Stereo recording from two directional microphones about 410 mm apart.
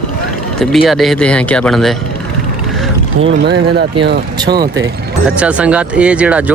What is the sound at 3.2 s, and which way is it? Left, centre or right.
Speech, right.